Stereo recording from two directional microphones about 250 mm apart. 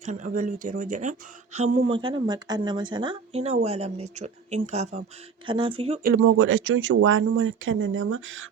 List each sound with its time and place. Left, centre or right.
0.0 s speech: right
6.2 s speech: right